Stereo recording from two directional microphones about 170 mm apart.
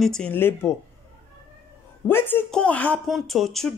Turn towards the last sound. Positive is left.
turn(degrees=0)  # may be behind; listen again after turning